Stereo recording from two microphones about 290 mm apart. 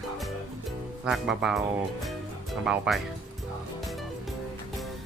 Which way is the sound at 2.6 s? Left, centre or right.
Centre.